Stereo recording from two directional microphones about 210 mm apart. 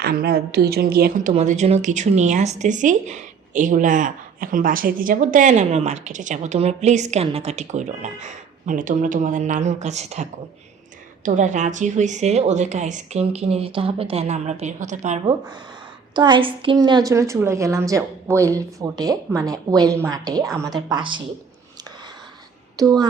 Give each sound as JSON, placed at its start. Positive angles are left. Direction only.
{"t": 0.0, "sound": "a woman's voice", "side_deg": -50}
{"t": 1.4, "sound": "speech", "side_deg": -30}
{"t": 11.3, "sound": "speech", "side_deg": -35}
{"t": 16.1, "sound": "a woman's voice", "side_deg": -20}
{"t": 22.8, "sound": "a woman's voice", "side_deg": -15}